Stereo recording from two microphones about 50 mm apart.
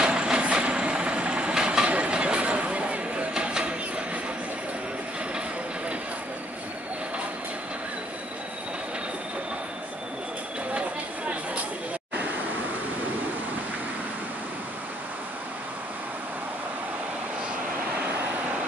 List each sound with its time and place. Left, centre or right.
0.0 s vehicle: centre